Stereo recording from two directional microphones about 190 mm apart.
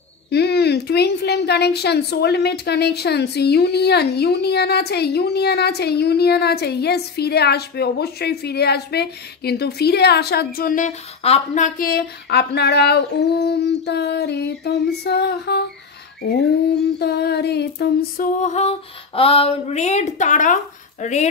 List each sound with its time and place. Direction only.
0.3 s a woman's voice: 60° left (ahead or behind)
16.2 s female singing: 60° left (ahead or behind); by 21.3 s 35° left (ahead or behind)